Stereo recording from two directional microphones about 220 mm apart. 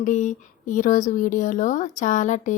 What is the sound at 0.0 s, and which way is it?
Speech, 35° left (ahead or behind).